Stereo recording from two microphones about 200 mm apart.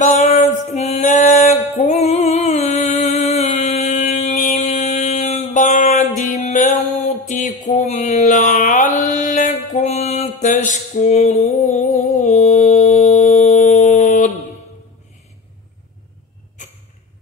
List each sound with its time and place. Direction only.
0.0 s a sound: 35° left (ahead or behind)
11.6 s music: 40° left (ahead or behind)
12.2 s mantra: 35° left (ahead or behind)